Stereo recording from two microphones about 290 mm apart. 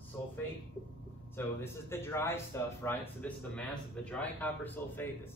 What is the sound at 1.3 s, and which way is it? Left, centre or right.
A man's voice, centre.